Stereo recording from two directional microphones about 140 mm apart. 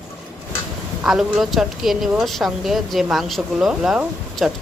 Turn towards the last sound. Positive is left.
turn(degrees=-5)  # may be behind; listen again after turning